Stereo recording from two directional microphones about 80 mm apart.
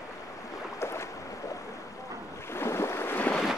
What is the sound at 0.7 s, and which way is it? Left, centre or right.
Boat, left.